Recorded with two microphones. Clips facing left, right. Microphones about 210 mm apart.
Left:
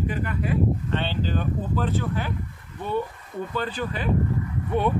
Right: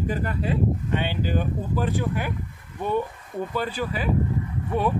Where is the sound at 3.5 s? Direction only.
10° right (ahead or behind).